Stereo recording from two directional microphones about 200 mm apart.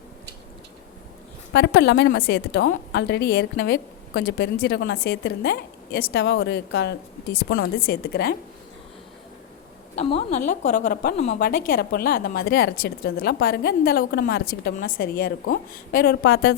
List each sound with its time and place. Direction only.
1.5 s a woman's voice: 60° left (ahead or behind)
9.9 s a woman's voice: 30° left (ahead or behind); by 16.6 s 55° left (ahead or behind)